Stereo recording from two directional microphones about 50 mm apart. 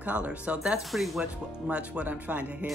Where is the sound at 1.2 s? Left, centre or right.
Right.